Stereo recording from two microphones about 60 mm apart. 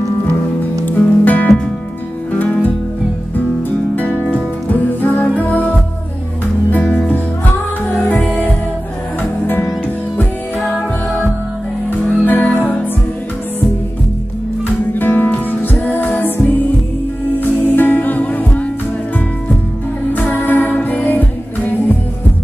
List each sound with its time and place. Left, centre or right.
0.9 s music: left
3.9 s music: left
6.8 s music: centre
10.6 s music: centre
11.9 s music: left
15.0 s music: left
20.3 s music: left